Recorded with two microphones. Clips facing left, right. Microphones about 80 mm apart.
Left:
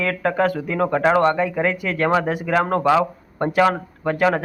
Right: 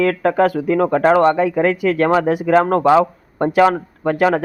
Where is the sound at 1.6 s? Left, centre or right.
Right.